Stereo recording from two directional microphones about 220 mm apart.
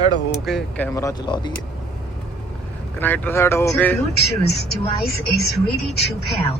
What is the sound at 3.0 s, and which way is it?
Speech, 10° left (ahead or behind).